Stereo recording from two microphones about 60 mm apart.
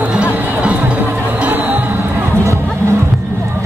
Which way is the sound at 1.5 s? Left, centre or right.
Right.